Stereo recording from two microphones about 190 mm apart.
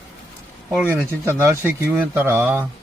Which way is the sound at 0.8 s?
10° right (ahead or behind).